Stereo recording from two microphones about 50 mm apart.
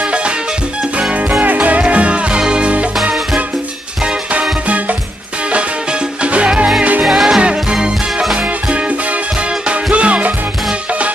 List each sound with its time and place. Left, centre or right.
0.0 s music: right
1.4 s music: right
4.0 s music: right
5.5 s music: right
7.1 s music: centre
8.4 s music: right